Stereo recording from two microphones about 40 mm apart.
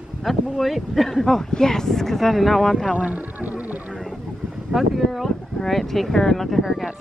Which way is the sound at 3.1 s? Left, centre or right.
Right.